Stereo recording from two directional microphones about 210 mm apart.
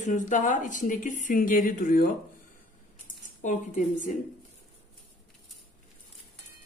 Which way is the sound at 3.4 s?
35° left (ahead or behind).